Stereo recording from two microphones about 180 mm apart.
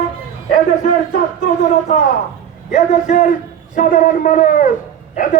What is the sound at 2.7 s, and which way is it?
A man's voice, 40° left (ahead or behind).